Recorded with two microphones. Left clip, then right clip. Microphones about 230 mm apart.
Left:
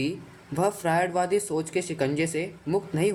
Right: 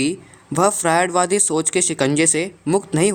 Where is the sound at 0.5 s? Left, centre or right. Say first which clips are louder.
Right 8 dB; right.